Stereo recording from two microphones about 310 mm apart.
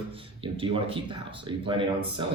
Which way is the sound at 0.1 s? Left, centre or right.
Centre.